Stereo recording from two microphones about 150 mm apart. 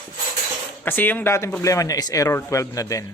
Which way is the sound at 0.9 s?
15° left (ahead or behind).